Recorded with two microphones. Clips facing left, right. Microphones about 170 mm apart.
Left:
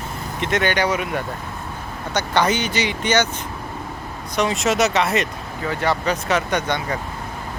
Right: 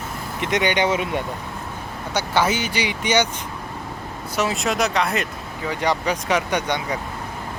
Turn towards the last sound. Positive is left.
turn(degrees=-10)  # may be behind; listen again after turning